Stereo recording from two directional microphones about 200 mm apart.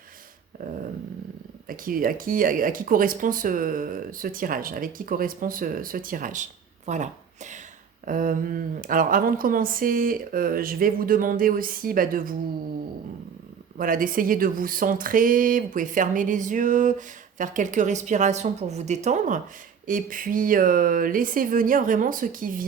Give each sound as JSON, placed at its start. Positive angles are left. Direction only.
{"t": 1.6, "sound": "speech", "side_deg": -45}
{"t": 13.7, "sound": "a woman's voice", "side_deg": -45}